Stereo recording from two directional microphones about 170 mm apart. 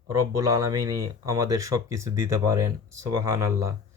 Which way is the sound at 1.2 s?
20° right (ahead or behind).